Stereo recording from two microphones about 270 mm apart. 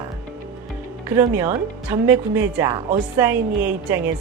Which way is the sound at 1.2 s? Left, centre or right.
Centre.